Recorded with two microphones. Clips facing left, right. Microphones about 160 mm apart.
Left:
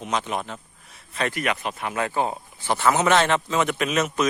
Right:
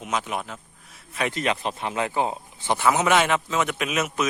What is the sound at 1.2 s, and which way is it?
A man's voice, 25° right (ahead or behind).